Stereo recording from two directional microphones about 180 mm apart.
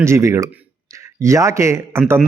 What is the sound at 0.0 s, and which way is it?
A man's voice, 15° right (ahead or behind).